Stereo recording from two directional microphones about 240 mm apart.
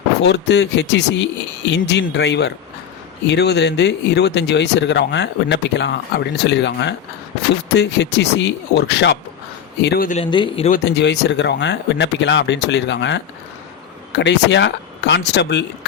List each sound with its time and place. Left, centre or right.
0.2 s speech: left
10.2 s speech: centre
10.7 s speech: left